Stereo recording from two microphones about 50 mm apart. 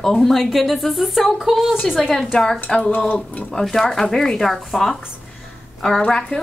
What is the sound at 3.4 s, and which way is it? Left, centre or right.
Speech, centre.